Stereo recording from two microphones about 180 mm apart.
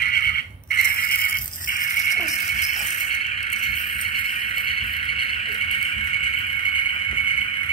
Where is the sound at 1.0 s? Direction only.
55° left (ahead or behind).